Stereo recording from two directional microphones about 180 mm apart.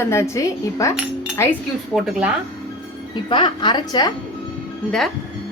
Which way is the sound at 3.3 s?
25° left (ahead or behind).